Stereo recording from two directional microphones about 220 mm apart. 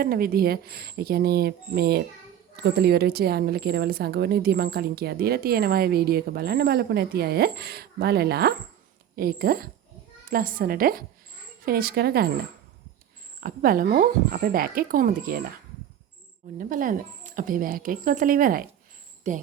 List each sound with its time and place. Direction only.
0.0 s a woman's voice: 40° right (ahead or behind)
13.4 s speech: 40° right (ahead or behind)
16.6 s speech: 40° right (ahead or behind)